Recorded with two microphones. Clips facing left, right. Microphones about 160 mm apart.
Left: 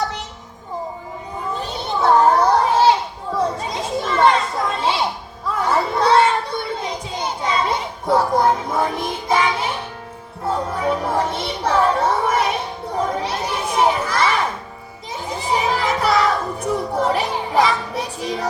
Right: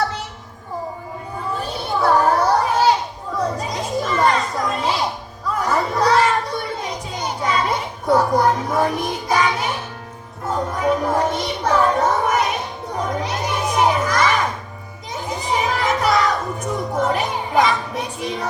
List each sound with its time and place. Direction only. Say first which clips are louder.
1.5 s children playing: right 1 dB; 20° left (ahead or behind)
5.5 s chatter: left 1 dB; 30° left (ahead or behind)
6.8 s children playing: left 1 dB; 25° left (ahead or behind)
10.4 s music: even; 30° left (ahead or behind)
13.0 s children playing: left 1 dB; 30° left (ahead or behind)
15.4 s music: left 1 dB; 30° left (ahead or behind)